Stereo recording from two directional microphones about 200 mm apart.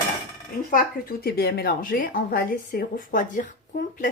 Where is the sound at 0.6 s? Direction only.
50° left (ahead or behind).